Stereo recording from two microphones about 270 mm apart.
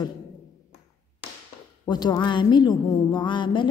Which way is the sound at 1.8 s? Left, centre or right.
Centre.